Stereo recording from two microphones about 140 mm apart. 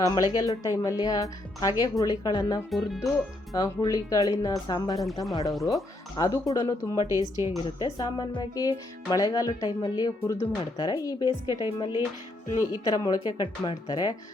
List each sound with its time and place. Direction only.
0.0 s speech: 25° left (ahead or behind)
2.6 s speech: centre (ahead or behind)
3.5 s speech: 25° left (ahead or behind)
7.1 s speech: 25° right (ahead or behind)
7.6 s speech: 30° left (ahead or behind)